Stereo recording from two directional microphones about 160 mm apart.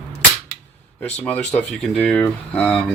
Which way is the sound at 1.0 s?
10° left (ahead or behind).